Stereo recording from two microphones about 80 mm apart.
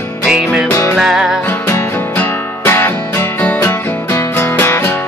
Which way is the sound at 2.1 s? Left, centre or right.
Left.